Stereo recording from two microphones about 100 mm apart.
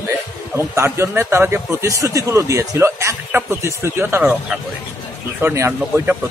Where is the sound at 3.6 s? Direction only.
25° right (ahead or behind).